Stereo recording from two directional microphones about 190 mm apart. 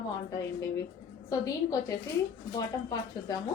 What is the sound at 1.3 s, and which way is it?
Speech, 20° left (ahead or behind).